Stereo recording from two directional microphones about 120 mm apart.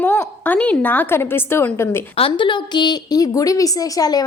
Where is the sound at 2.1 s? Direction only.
50° left (ahead or behind).